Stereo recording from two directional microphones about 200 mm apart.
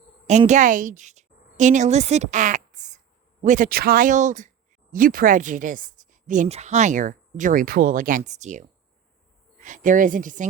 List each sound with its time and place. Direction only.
0.3 s a woman's voice: 35° right (ahead or behind)